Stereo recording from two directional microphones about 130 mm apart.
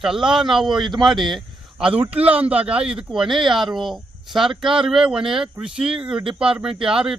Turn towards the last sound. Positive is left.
turn(degrees=-5)  # may be behind; listen again after turning